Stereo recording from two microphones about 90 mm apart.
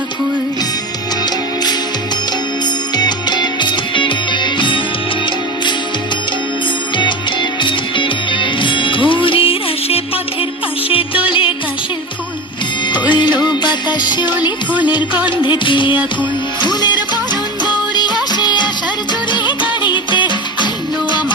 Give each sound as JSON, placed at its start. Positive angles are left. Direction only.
{"t": 2.9, "sound": "music", "side_deg": 50}
{"t": 7.6, "sound": "music", "side_deg": 65}
{"t": 11.3, "sound": "music", "side_deg": 70}
{"t": 12.9, "sound": "music", "side_deg": 60}
{"t": 15.4, "sound": "music", "side_deg": 65}
{"t": 16.6, "sound": "music", "side_deg": 55}
{"t": 19.8, "sound": "music", "side_deg": 60}